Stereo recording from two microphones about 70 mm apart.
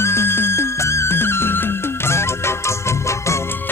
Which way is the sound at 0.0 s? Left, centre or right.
Left.